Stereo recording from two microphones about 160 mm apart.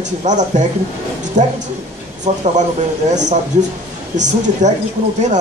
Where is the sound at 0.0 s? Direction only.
50° right (ahead or behind).